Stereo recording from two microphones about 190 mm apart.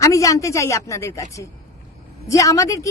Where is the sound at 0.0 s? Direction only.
15° left (ahead or behind).